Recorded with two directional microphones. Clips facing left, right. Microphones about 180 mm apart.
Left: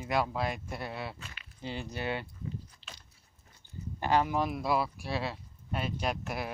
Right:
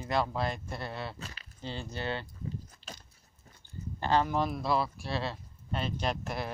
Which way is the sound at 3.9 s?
10° left (ahead or behind).